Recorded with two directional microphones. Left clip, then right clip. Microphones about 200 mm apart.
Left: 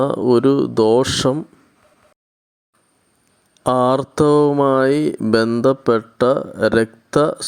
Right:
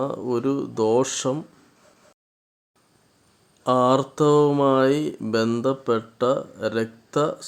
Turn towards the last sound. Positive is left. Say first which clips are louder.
# left 7 dB
turn(degrees=35)  # may be behind; listen again after turning